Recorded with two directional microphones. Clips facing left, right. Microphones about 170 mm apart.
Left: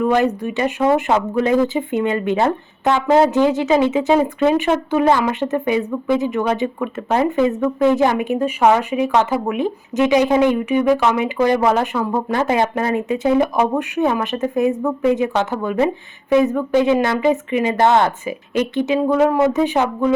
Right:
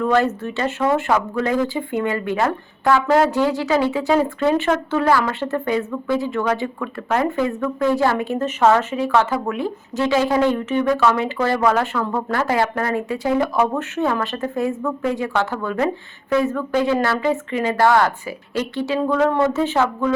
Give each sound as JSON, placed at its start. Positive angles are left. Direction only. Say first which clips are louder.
{"t": 0.0, "sound": "speech", "louder": "left 2 dB", "side_deg": 15}